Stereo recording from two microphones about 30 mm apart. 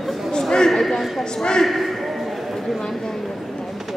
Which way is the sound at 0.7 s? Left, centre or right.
Centre.